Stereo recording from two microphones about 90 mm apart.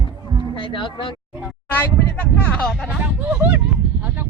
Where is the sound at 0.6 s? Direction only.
65° left (ahead or behind).